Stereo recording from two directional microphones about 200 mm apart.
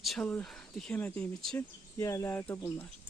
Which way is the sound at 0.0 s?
Centre (ahead or behind).